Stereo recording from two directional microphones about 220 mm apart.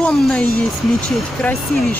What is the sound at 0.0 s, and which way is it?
Speech, 5° left (ahead or behind).